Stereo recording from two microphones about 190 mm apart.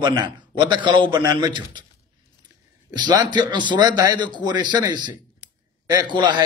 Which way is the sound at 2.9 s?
20° right (ahead or behind).